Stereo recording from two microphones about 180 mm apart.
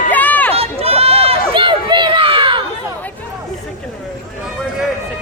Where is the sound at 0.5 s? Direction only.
35° right (ahead or behind).